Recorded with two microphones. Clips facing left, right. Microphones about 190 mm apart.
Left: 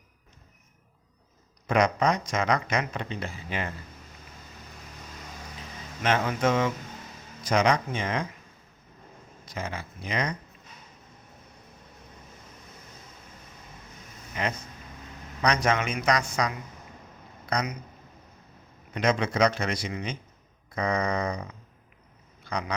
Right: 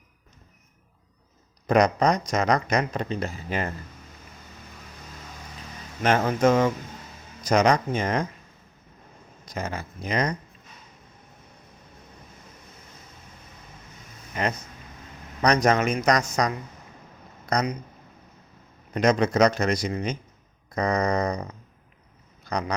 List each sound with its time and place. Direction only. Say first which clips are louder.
1.6 s speech: right 4 dB; 40° right (ahead or behind)
6.0 s a man's voice: right 4 dB; 45° right (ahead or behind)
9.5 s a man's voice: right 3 dB; 45° right (ahead or behind)
14.3 s speech: right 3 dB; 45° right (ahead or behind)
17.4 s a sound: right 4 dB; 40° right (ahead or behind)
18.9 s a man's voice: right 4 dB; 40° right (ahead or behind)
22.5 s a sound: right 3 dB; 40° right (ahead or behind)